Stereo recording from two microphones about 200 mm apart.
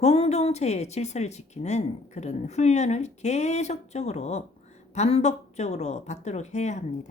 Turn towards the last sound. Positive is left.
turn(degrees=35)  # may be behind; listen again after turning